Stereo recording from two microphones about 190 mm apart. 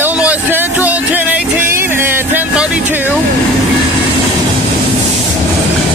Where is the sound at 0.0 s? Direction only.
10° right (ahead or behind).